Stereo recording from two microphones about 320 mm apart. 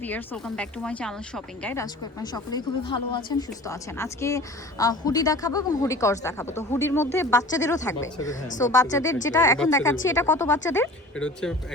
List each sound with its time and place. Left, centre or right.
0.0 s speech: centre
8.4 s speech: left
8.7 s speech: centre